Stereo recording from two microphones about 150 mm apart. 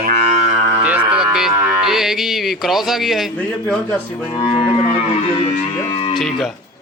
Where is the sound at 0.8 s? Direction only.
5° right (ahead or behind).